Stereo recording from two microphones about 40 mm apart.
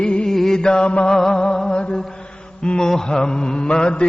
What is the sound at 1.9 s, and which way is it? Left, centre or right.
Mantra, centre.